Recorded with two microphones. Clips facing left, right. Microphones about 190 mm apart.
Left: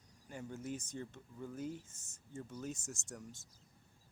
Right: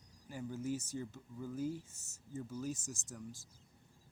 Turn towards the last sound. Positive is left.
turn(degrees=0)  # may be behind; listen again after turning